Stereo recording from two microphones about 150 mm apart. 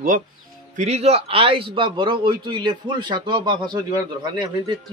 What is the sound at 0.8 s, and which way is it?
Speech, 45° right (ahead or behind).